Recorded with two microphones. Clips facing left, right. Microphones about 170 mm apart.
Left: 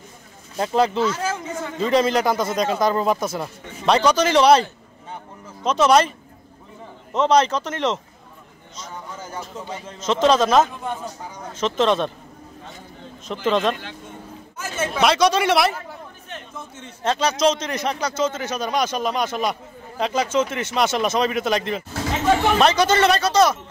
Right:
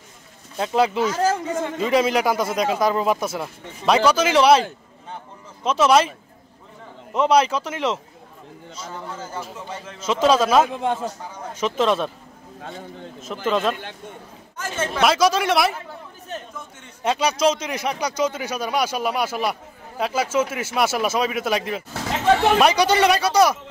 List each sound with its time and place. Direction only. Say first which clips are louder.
0.6 s a man's voice: even; 5° right (ahead or behind)
1.1 s speech: right 5 dB; 35° right (ahead or behind)
1.8 s a man's voice: left 2 dB; 5° right (ahead or behind)
7.2 s a man's voice: even; 10° right (ahead or behind)
9.9 s a man's voice: left 1 dB; 10° right (ahead or behind)
13.5 s speech: left 1 dB; 5° right (ahead or behind)
17.0 s a man's voice: even; 10° right (ahead or behind)